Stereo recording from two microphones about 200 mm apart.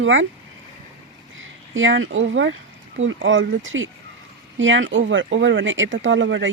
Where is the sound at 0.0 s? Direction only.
70° right (ahead or behind).